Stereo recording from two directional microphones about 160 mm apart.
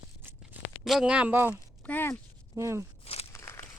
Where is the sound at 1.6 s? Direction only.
10° left (ahead or behind).